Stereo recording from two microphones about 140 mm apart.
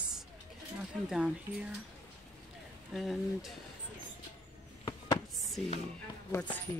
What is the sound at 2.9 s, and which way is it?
Speech, centre (ahead or behind).